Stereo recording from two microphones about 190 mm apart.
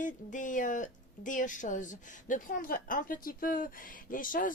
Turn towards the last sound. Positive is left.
turn(degrees=45)  # may be behind; listen again after turning